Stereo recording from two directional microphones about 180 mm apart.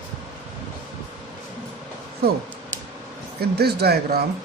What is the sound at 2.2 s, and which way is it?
Speech, 60° right (ahead or behind).